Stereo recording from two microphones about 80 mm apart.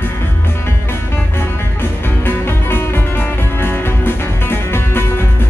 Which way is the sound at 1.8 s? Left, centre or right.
Left.